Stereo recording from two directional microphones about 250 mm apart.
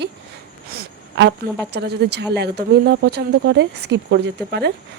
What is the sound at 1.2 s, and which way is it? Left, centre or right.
Speech, right.